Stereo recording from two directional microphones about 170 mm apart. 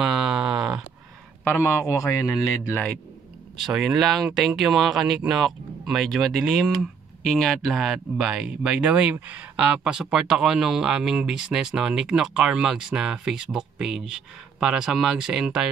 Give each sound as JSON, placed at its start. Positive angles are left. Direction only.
{"t": 0.0, "sound": "sheep", "side_deg": -5}
{"t": 1.4, "sound": "a man's voice", "side_deg": 10}
{"t": 3.6, "sound": "speech", "side_deg": 0}